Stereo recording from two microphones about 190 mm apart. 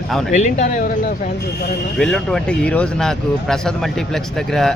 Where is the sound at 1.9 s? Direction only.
5° left (ahead or behind).